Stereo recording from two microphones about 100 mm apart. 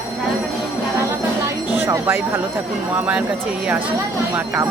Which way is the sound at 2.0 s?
20° right (ahead or behind).